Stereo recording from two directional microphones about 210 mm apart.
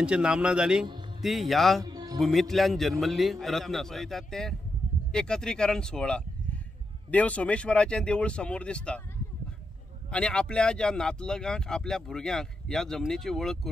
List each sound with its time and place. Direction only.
0.0 s speech: 5° right (ahead or behind)
1.9 s music: 20° right (ahead or behind)
2.1 s speech: centre (ahead or behind)
10.1 s speech: 5° left (ahead or behind)